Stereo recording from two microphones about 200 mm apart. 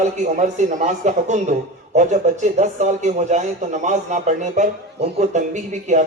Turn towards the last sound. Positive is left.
turn(degrees=-35)  # may be behind; listen again after turning